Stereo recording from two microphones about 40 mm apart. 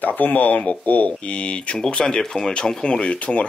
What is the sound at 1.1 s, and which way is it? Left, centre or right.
Speech, left.